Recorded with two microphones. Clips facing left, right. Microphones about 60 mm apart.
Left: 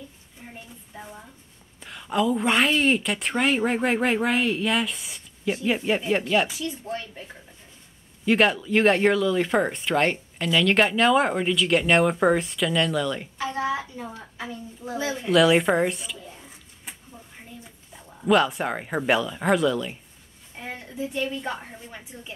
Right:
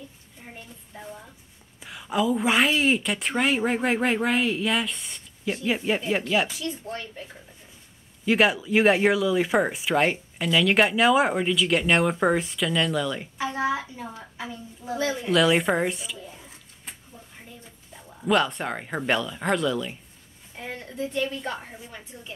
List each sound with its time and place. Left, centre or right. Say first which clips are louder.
0.9 s a sound: right 1 dB; centre
1.8 s a woman's voice: left 1 dB; centre
8.3 s a woman's voice: left 1 dB; centre
13.4 s a woman's voice: right 1 dB; right
15.2 s speech: left 3 dB; centre
17.9 s a woman's voice: left 2 dB; centre